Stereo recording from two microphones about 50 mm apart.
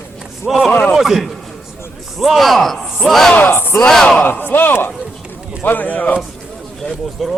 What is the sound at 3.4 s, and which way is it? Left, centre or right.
Speech, left.